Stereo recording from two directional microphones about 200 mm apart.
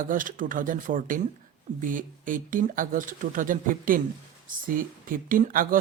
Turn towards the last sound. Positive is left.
turn(degrees=-45)  # may be behind; listen again after turning